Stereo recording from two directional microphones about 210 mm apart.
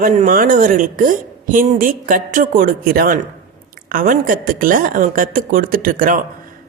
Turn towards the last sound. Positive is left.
turn(degrees=-40)  # may be behind; listen again after turning